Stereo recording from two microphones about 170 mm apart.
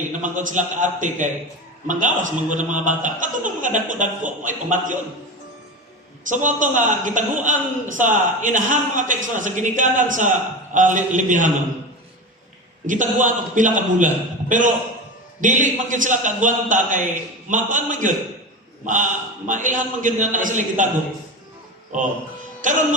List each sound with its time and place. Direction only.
0.2 s a man's voice: 50° right (ahead or behind)
6.3 s a man's voice: 50° right (ahead or behind)
12.9 s a man's voice: 50° right (ahead or behind)
15.4 s a man's voice: 50° right (ahead or behind)
21.9 s a man's voice: 50° right (ahead or behind)